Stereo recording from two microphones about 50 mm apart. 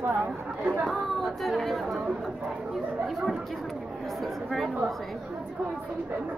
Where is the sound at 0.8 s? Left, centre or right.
Centre.